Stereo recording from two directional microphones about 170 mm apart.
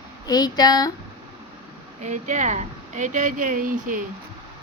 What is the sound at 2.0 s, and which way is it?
Speech, 45° right (ahead or behind).